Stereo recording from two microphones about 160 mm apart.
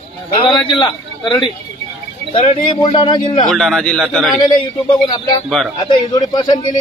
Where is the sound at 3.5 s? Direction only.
Centre (ahead or behind).